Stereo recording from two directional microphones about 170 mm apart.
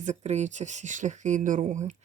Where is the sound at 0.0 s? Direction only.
45° right (ahead or behind).